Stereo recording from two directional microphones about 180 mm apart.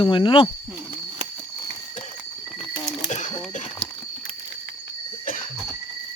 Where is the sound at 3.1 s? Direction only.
40° left (ahead or behind).